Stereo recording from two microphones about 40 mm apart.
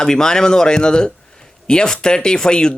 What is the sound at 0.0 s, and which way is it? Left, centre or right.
A man's voice, centre.